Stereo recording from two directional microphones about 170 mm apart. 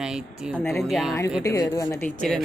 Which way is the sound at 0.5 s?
15° left (ahead or behind).